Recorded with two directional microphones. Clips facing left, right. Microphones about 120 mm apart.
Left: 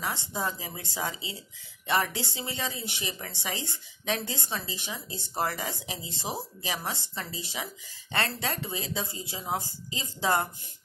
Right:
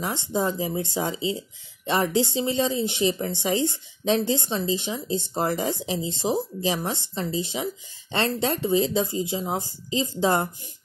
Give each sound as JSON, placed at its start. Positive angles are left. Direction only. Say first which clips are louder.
{"t": 0.0, "sound": "speech", "louder": "right 7 dB", "side_deg": -25}